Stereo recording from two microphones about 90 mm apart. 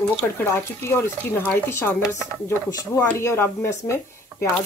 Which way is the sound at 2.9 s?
30° left (ahead or behind).